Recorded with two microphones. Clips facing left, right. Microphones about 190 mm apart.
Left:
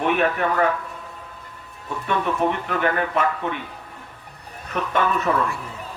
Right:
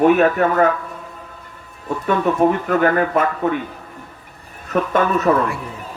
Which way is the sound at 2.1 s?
40° right (ahead or behind).